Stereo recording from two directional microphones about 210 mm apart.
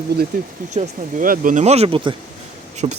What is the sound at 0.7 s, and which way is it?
Speech, 35° right (ahead or behind).